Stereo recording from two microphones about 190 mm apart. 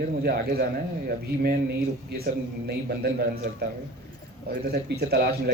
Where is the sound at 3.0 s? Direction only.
50° right (ahead or behind).